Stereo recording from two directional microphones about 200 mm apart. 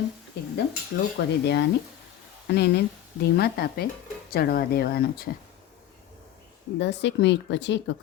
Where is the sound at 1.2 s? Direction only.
55° left (ahead or behind).